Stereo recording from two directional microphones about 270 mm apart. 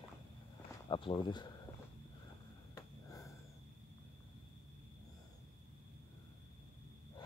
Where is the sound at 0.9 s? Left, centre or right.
Centre.